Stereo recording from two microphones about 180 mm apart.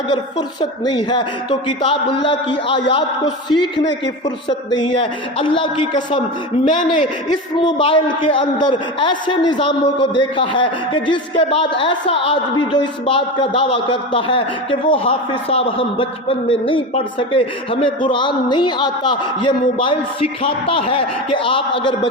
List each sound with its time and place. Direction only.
0.1 s a man's voice: 25° left (ahead or behind)
7.3 s a man's voice: 25° left (ahead or behind)